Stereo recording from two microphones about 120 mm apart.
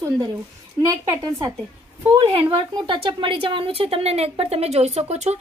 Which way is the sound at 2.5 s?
45° right (ahead or behind).